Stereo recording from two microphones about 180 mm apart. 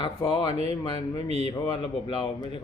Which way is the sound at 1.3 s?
35° right (ahead or behind).